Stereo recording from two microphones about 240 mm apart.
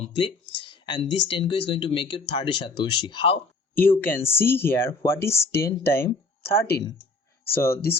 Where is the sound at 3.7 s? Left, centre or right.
Centre.